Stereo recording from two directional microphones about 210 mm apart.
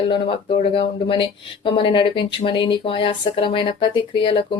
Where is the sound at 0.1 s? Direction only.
25° left (ahead or behind).